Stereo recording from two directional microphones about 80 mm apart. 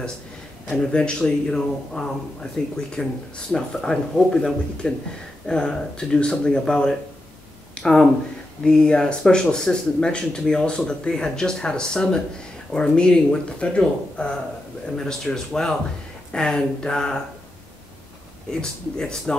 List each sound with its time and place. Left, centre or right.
0.7 s speech: centre
18.5 s speech: centre